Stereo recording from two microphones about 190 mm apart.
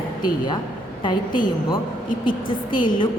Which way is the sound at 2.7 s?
25° left (ahead or behind).